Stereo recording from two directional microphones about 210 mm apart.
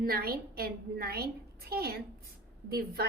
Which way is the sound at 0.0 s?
45° right (ahead or behind).